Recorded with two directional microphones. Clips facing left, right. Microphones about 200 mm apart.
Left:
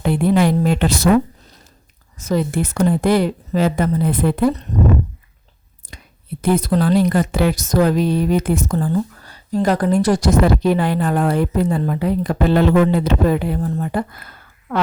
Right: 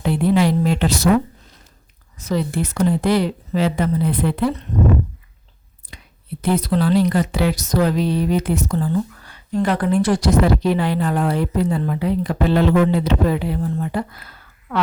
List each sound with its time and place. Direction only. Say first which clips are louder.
0.0 s a woman's voice: left 1 dB; 50° left (ahead or behind)
2.1 s a woman's voice: left 2 dB; 45° left (ahead or behind)
5.9 s whispering: left 2 dB; 45° left (ahead or behind)
6.4 s a woman's voice: left 2 dB; 45° left (ahead or behind)